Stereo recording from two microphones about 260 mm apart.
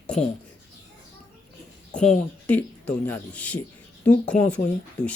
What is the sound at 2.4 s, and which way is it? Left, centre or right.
Speech, centre.